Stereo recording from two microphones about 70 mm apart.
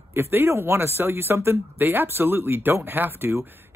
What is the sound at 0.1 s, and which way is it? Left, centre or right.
Speech, right.